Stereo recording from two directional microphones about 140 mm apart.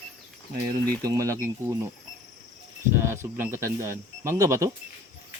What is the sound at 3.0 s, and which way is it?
Speech, 15° right (ahead or behind).